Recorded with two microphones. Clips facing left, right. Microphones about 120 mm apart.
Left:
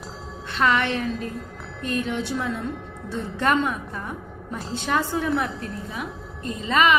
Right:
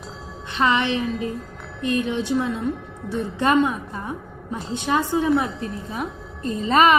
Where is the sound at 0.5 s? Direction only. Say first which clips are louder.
Right 1 dB; 20° right (ahead or behind).